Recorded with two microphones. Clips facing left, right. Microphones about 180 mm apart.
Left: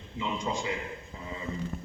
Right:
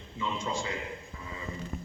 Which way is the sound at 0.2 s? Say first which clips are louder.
Left 1 dB; 20° left (ahead or behind).